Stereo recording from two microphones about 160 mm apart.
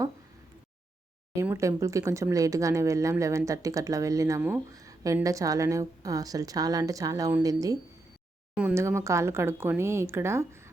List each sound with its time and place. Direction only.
1.4 s speech: 20° right (ahead or behind)